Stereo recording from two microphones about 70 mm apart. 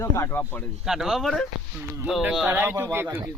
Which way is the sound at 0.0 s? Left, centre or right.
Left.